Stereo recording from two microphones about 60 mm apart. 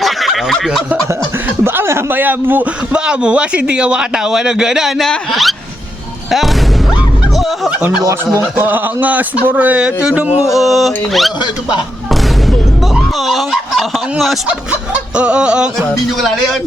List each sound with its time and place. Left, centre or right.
0.0 s snicker: centre
1.6 s a sound: right
2.9 s a man's voice: centre
4.9 s speech: centre
8.4 s a man's voice: right
9.8 s a man's voice: centre
10.5 s speech: centre
13.2 s turkey: centre
14.7 s speech: centre
16.2 s speech: centre